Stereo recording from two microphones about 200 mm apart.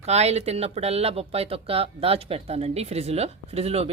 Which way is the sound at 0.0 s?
30° right (ahead or behind).